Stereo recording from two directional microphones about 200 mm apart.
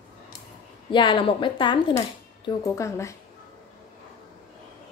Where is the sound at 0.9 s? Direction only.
25° left (ahead or behind).